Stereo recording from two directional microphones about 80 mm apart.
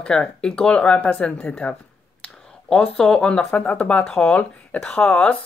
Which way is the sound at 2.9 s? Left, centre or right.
Centre.